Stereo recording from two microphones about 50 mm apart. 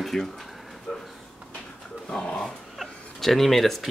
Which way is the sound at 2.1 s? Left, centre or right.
Centre.